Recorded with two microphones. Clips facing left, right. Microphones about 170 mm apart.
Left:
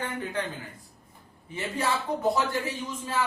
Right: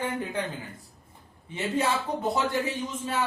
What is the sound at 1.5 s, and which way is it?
Speech, 20° right (ahead or behind).